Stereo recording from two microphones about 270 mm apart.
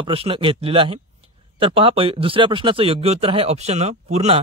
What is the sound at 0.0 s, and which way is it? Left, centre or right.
Speech, centre.